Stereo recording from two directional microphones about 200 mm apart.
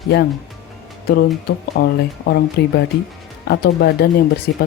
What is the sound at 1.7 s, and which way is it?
Speech, 55° left (ahead or behind).